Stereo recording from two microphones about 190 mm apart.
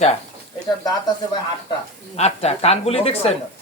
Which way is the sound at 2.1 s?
35° left (ahead or behind).